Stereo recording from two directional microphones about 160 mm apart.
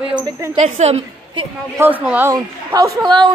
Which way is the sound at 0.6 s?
45° right (ahead or behind).